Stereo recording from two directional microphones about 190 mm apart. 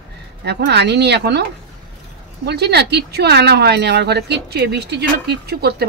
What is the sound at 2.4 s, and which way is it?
Speech, 60° right (ahead or behind).